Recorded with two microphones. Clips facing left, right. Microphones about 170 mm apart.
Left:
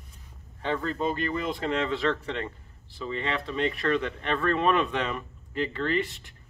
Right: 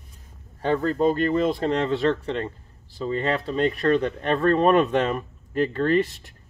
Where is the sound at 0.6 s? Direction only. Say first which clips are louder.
Right 7 dB; 45° right (ahead or behind).